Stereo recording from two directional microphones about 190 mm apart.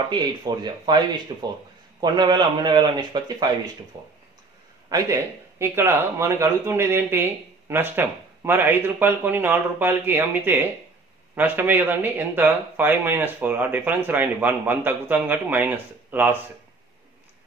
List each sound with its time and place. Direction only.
0.1 s a man's voice: 20° right (ahead or behind)
4.8 s speech: 15° right (ahead or behind)